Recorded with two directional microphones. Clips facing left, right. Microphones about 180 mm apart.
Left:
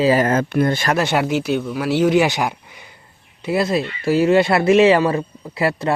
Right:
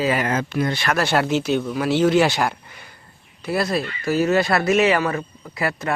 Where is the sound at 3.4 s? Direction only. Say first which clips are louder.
Left 3 dB; 25° left (ahead or behind).